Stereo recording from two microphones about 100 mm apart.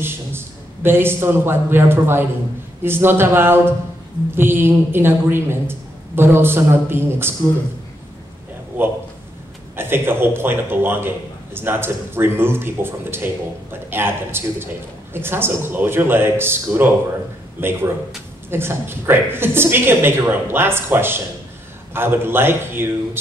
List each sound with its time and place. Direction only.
0.0 s a man's voice: 25° right (ahead or behind)
8.7 s a man's voice: 20° right (ahead or behind)